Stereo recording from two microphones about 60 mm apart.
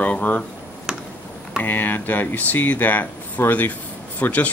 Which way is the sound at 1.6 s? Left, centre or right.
Left.